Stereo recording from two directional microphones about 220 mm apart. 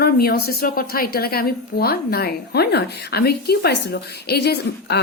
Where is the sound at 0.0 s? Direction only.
45° left (ahead or behind).